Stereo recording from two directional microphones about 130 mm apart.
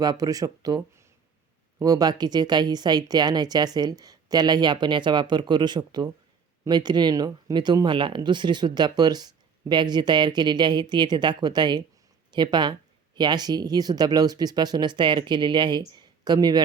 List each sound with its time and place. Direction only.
0.0 s speech: 30° right (ahead or behind)